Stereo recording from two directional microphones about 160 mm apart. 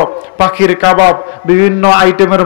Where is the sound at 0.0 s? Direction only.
10° right (ahead or behind).